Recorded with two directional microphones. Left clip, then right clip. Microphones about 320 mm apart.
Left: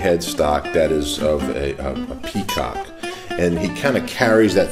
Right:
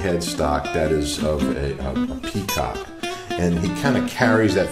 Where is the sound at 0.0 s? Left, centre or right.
Left.